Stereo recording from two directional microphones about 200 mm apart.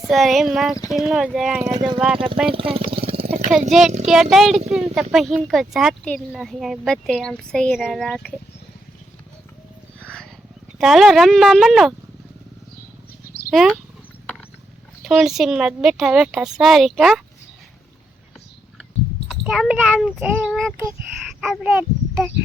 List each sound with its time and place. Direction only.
0.1 s speech: centre (ahead or behind)
1.6 s speech: 20° right (ahead or behind)
3.7 s speech: centre (ahead or behind)
10.8 s speech: centre (ahead or behind)
13.5 s speech: centre (ahead or behind)
15.0 s speech: centre (ahead or behind)
19.3 s speech: centre (ahead or behind)